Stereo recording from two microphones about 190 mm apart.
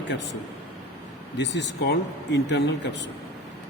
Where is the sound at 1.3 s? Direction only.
65° left (ahead or behind).